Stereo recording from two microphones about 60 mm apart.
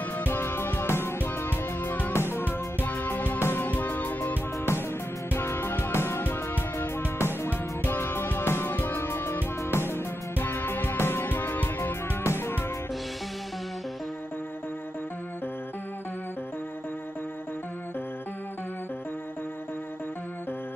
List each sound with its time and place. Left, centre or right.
0.3 s music: left
2.1 s music: left
2.4 s music: left
3.3 s music: left
3.6 s music: left
5.3 s music: left
6.2 s music: left
12.3 s music: left